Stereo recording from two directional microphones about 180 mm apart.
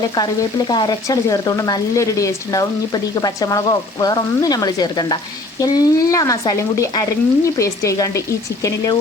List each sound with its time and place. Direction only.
0.7 s speech: 20° left (ahead or behind)
6.5 s frying: 15° left (ahead or behind)
8.6 s speech: 20° left (ahead or behind)